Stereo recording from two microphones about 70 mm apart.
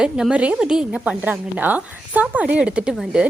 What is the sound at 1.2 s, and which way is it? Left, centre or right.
A woman's voice, right.